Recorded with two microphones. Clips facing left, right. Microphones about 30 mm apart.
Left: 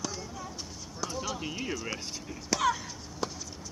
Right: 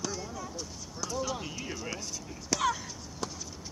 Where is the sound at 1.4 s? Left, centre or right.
Left.